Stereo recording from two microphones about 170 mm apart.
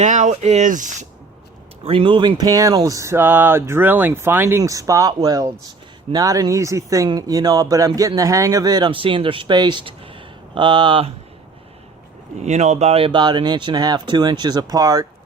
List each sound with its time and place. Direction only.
0.0 s speech: 45° right (ahead or behind)
1.8 s speech: 35° right (ahead or behind)
12.4 s speech: 40° right (ahead or behind); by 15.0 s 20° right (ahead or behind)